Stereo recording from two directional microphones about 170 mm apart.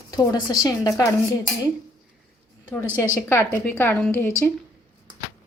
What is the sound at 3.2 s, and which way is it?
Speech, 15° left (ahead or behind).